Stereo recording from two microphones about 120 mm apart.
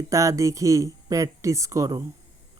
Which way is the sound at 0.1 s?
25° right (ahead or behind).